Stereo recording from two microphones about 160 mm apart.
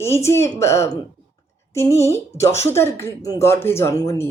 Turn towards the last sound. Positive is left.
turn(degrees=20)  # may be behind; listen again after turning